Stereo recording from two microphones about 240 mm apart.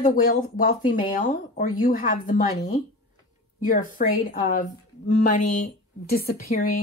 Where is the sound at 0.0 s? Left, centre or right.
Left.